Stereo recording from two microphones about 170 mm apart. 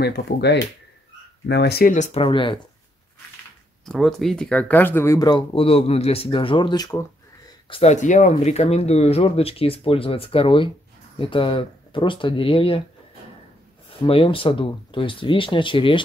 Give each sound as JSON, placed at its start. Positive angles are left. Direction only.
{"t": 0.0, "sound": "speech", "side_deg": 75}
{"t": 2.0, "sound": "speech", "side_deg": 35}
{"t": 3.8, "sound": "speech", "side_deg": 0}
{"t": 7.7, "sound": "speech", "side_deg": 40}
{"t": 14.0, "sound": "speech", "side_deg": 30}